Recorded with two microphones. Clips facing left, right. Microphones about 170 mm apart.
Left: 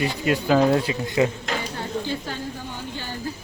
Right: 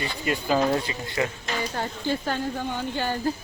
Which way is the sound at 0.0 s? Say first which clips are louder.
Left 5 dB; centre (ahead or behind).